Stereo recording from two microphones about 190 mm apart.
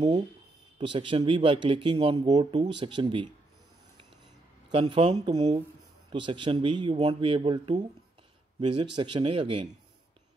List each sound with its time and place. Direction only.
0.7 s speech: 25° right (ahead or behind)
4.6 s speech: 30° right (ahead or behind)